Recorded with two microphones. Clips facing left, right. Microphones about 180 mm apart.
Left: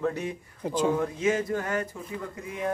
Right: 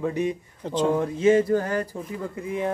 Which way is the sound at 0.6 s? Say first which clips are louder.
Right 2 dB; 10° left (ahead or behind).